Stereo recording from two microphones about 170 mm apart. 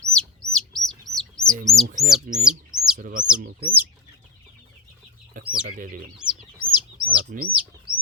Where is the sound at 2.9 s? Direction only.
55° right (ahead or behind).